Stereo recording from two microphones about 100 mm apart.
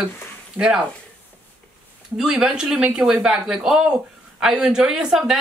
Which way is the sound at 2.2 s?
5° right (ahead or behind).